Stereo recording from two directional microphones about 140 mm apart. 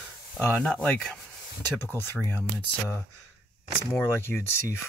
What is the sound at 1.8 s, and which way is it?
Speech, 15° left (ahead or behind).